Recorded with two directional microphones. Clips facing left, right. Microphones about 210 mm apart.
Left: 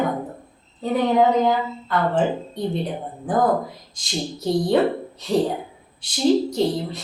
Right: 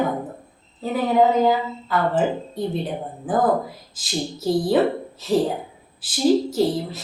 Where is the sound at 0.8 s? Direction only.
5° right (ahead or behind).